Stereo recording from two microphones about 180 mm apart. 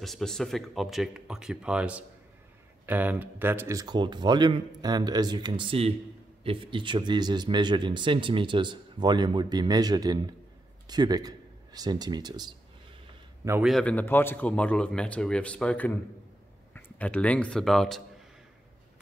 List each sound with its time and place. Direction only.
0.0 s a man's voice: centre (ahead or behind); by 12.5 s 25° right (ahead or behind)
13.7 s a man's voice: 5° left (ahead or behind)